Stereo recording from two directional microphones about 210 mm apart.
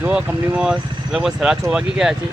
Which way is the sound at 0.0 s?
5° right (ahead or behind).